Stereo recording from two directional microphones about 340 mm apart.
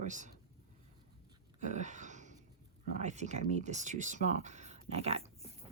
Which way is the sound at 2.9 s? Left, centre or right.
Centre.